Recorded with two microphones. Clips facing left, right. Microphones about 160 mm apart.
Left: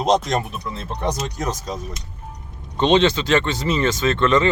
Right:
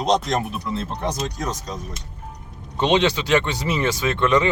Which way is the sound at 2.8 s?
10° right (ahead or behind).